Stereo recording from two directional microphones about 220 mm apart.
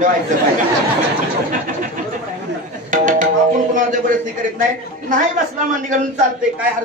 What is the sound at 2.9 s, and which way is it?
Tabla, 35° right (ahead or behind).